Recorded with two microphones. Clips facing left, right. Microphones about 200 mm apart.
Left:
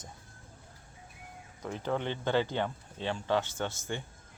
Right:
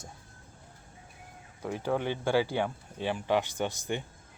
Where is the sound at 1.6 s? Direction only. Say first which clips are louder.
Right 3 dB; 10° right (ahead or behind).